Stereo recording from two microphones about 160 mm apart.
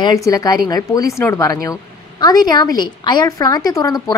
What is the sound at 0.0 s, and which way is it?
A woman's voice, 20° left (ahead or behind).